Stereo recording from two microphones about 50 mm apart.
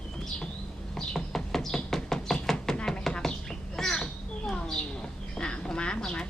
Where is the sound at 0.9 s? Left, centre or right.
Centre.